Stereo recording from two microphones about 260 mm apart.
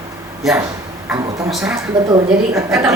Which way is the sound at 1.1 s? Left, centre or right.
Centre.